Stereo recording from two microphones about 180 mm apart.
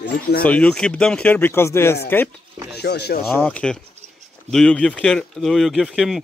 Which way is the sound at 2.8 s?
65° left (ahead or behind).